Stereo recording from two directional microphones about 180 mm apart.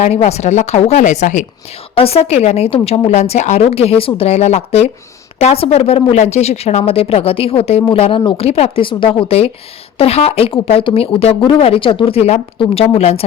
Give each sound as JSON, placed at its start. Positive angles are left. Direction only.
{"t": 0.0, "sound": "a woman's voice", "side_deg": 35}